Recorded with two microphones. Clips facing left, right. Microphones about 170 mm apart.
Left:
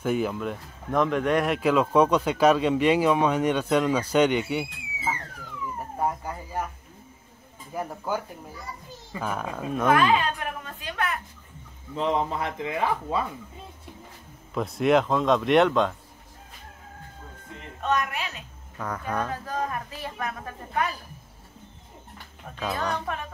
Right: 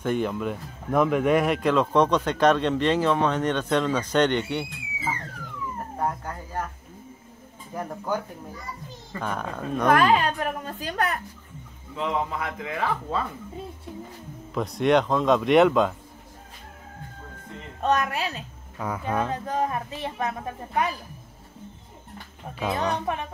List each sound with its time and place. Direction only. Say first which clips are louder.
0.0 s speech: even; 5° left (ahead or behind)
5.9 s howl: left 1 dB; 10° left (ahead or behind)
7.7 s a man's voice: right 1 dB; 5° left (ahead or behind)
9.9 s a woman's voice: right 2 dB; 40° right (ahead or behind)
11.9 s speech: left 2 dB; 30° left (ahead or behind)
14.5 s a man's voice: even; centre (ahead or behind)
17.8 s a woman's voice: right 3 dB; 35° right (ahead or behind)
18.8 s speech: right 2 dB; 10° right (ahead or behind)
19.2 s a woman's voice: right 3 dB; 20° right (ahead or behind)
22.6 s a woman's voice: right 3 dB; 20° right (ahead or behind)